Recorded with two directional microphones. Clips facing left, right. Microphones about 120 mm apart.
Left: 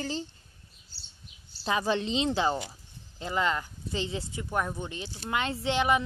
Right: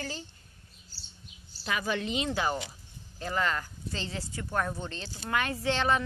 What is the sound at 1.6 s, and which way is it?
A woman's voice, 30° left (ahead or behind).